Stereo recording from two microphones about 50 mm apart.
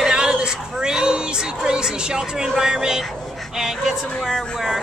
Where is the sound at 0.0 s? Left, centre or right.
Centre.